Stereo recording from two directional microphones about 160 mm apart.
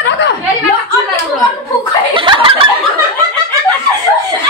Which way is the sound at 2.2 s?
30° right (ahead or behind).